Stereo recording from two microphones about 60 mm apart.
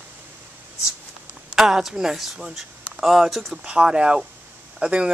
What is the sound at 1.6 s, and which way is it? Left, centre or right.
Speech, centre.